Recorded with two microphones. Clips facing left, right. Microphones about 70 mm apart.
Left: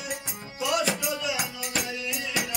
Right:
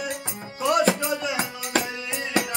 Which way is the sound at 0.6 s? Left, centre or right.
Right.